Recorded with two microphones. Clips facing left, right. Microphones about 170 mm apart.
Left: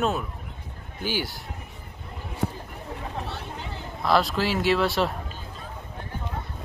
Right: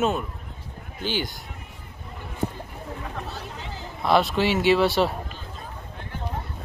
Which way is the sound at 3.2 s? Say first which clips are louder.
Left 1 dB; 65° left (ahead or behind).